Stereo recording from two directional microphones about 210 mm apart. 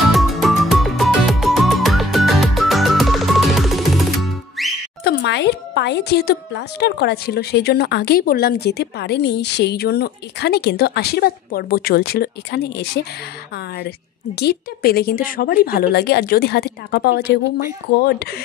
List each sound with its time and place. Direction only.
0.1 s music: centre (ahead or behind)
5.0 s speech: 55° left (ahead or behind)